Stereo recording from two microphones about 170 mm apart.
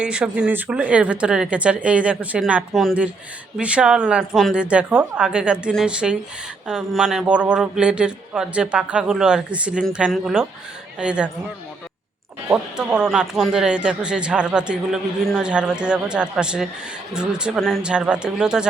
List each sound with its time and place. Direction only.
0.0 s speech: 5° right (ahead or behind)
12.7 s speech: 5° right (ahead or behind)